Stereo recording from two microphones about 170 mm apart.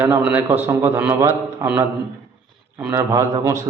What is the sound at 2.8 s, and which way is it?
Speech, 15° right (ahead or behind).